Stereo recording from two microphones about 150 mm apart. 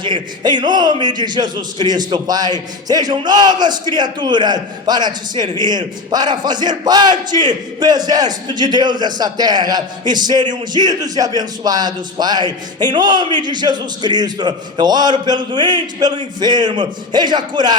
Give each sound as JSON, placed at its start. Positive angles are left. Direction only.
{"t": 0.0, "sound": "a man's voice", "side_deg": -30}